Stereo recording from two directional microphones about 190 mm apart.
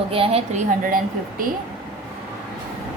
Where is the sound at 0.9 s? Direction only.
45° right (ahead or behind).